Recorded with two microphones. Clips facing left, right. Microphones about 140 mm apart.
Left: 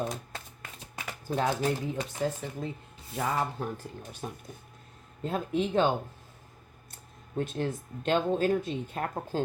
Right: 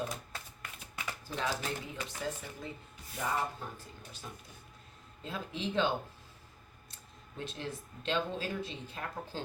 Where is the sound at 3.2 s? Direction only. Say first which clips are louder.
Left 5 dB; 80° left.